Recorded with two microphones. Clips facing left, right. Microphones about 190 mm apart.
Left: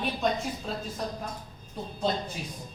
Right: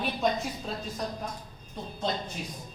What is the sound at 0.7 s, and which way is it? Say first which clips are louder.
Speech: left 1 dB; centre (ahead or behind).